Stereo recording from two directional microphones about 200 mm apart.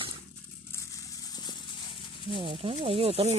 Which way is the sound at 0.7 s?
20° left (ahead or behind).